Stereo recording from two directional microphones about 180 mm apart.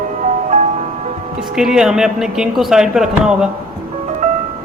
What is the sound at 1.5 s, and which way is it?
Speech, 5° right (ahead or behind).